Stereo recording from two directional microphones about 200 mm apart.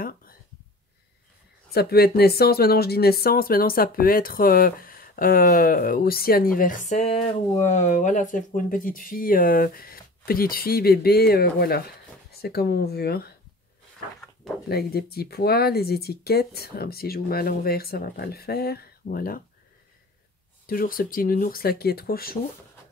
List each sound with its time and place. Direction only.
0.0 s a sound: 45° left (ahead or behind)
1.7 s speech: 50° left (ahead or behind)
14.7 s speech: 50° left (ahead or behind)
20.6 s speech: 45° left (ahead or behind)